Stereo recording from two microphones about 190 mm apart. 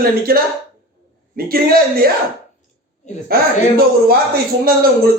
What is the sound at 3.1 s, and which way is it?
Speech, 40° left (ahead or behind).